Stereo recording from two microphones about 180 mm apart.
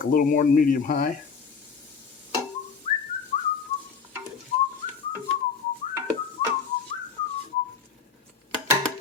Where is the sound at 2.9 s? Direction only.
40° left (ahead or behind).